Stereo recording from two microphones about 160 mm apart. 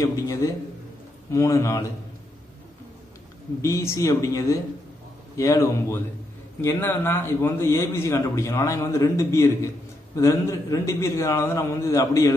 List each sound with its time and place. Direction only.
0.0 s a man's voice: 20° left (ahead or behind)
3.6 s a man's voice: 20° left (ahead or behind)